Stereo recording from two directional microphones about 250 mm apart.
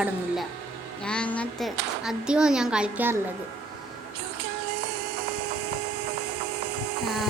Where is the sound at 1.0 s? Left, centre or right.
Centre.